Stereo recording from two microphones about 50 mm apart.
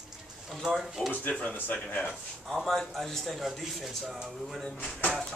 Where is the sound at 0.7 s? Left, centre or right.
Centre.